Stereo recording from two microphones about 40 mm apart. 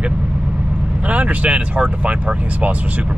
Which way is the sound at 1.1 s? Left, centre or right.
Right.